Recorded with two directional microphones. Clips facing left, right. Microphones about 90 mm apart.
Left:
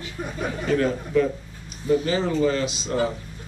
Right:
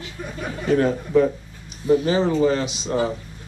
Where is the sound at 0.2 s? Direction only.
25° left (ahead or behind).